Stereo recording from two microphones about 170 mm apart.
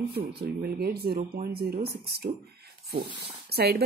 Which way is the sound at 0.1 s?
70° right (ahead or behind).